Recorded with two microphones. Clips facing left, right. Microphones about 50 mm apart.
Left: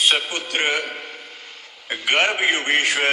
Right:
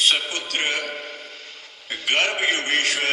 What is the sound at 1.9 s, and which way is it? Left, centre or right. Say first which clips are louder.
A man's voice: left 3 dB; left.